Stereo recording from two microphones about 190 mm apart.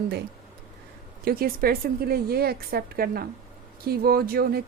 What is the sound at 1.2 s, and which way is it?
A woman's voice, 50° right (ahead or behind).